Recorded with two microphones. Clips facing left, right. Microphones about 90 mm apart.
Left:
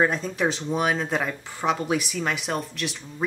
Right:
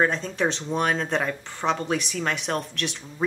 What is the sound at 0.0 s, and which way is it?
Speech, 5° left (ahead or behind).